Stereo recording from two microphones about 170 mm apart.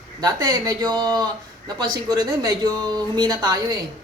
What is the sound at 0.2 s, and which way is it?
Speech, 20° right (ahead or behind).